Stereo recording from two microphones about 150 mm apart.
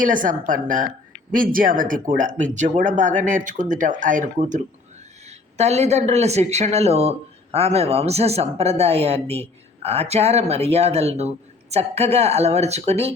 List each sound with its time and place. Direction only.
0.0 s speech: 60° right (ahead or behind)
5.3 s a man's voice: 45° right (ahead or behind)